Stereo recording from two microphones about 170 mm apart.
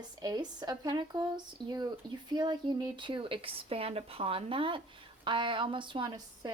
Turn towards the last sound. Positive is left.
turn(degrees=-25)  # may be behind; listen again after turning